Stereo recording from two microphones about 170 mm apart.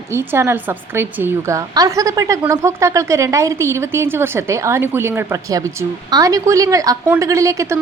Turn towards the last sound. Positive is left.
turn(degrees=-20)  # may be behind; listen again after turning